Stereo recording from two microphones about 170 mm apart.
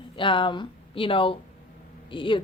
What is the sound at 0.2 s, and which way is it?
A woman's voice, 30° left (ahead or behind).